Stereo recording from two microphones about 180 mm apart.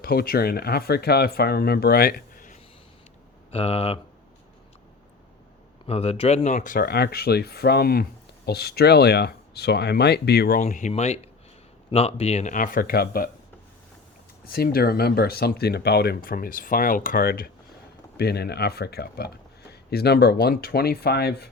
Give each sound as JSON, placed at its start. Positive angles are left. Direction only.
{"t": 0.0, "sound": "speech", "side_deg": 55}
{"t": 3.5, "sound": "speech", "side_deg": 35}
{"t": 5.8, "sound": "speech", "side_deg": 35}
{"t": 14.4, "sound": "speech", "side_deg": 55}